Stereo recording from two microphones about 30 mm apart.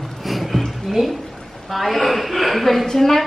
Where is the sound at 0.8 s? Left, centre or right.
Centre.